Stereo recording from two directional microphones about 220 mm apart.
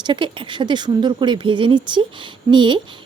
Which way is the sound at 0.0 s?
20° right (ahead or behind).